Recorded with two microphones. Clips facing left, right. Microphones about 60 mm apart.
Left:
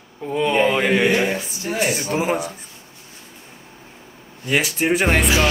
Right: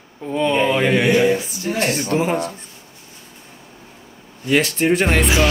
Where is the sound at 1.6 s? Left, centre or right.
Centre.